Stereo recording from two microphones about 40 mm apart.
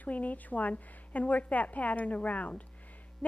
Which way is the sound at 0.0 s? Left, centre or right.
Left.